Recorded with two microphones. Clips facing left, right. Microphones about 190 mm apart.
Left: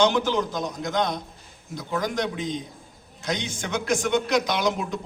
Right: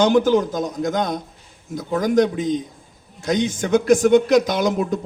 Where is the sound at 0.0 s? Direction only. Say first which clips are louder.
Right 6 dB; 50° right (ahead or behind).